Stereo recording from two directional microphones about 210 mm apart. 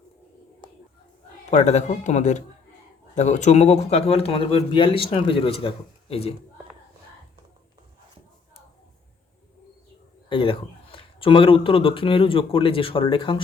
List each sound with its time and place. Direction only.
1.5 s speech: 30° left (ahead or behind)
10.2 s speech: 25° left (ahead or behind)